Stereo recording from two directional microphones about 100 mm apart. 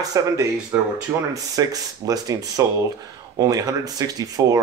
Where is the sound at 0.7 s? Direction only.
20° right (ahead or behind).